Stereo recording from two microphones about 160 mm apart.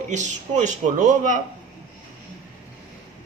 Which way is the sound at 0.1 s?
50° right (ahead or behind).